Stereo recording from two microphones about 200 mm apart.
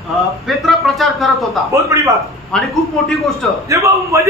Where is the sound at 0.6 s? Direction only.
Centre (ahead or behind).